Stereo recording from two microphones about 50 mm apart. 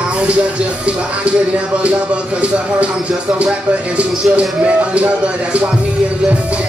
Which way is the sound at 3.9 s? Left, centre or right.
Right.